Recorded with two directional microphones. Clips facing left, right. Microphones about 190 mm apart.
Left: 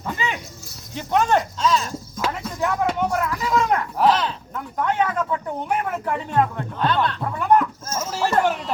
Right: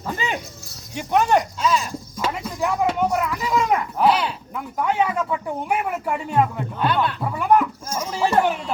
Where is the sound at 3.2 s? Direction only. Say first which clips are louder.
Even; 5° right (ahead or behind).